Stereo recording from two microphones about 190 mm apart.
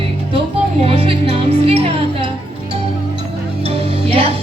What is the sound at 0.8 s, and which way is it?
Music, 30° right (ahead or behind).